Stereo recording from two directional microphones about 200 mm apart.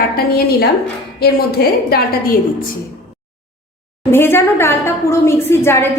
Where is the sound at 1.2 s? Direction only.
50° left (ahead or behind).